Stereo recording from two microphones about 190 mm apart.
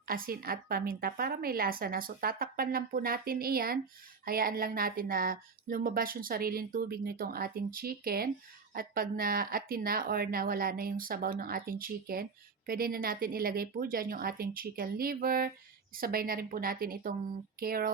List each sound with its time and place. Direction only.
0.0 s speech: 50° right (ahead or behind)